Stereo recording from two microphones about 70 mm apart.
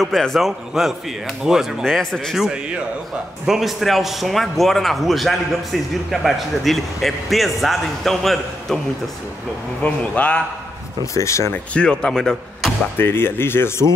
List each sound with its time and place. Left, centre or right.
0.0 s a man's voice: centre
2.3 s a man's voice: centre
9.8 s a man's voice: centre
11.1 s speech: left
11.5 s speech: centre
12.9 s speech: left